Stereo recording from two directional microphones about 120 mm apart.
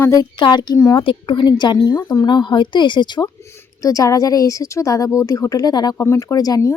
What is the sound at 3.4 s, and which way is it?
Speech, 25° left (ahead or behind).